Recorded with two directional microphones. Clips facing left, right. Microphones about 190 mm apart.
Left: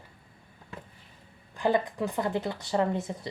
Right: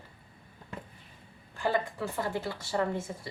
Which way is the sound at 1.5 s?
20° left (ahead or behind).